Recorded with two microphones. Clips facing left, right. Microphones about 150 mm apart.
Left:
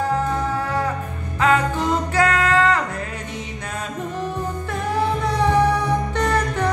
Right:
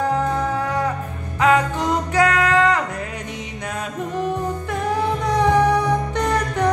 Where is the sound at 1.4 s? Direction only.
15° right (ahead or behind).